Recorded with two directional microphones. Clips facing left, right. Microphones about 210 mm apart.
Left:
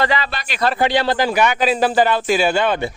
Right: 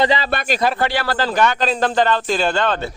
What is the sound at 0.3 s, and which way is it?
Speech, 50° right (ahead or behind).